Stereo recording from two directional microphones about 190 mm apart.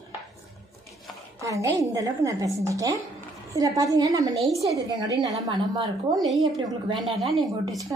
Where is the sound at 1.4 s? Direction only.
15° right (ahead or behind).